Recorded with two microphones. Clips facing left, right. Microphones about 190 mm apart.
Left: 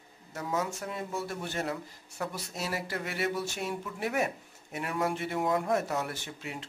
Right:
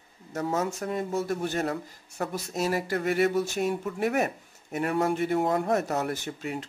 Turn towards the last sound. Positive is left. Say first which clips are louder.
# right 7 dB
turn(degrees=-45)  # may be behind; listen again after turning